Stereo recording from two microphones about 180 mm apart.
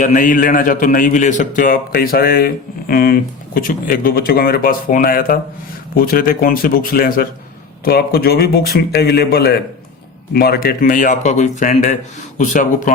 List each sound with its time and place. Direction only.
0.0 s a man's voice: 45° left (ahead or behind)